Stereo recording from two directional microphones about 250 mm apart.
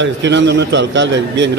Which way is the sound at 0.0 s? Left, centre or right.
Right.